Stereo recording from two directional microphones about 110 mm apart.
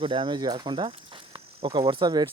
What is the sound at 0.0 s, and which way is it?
Speech, 50° right (ahead or behind).